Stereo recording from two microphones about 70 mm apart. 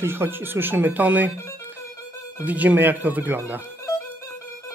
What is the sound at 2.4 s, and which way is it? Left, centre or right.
Speech, right.